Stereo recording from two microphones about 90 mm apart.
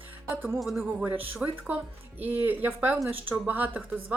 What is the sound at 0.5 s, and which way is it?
Speech, centre (ahead or behind).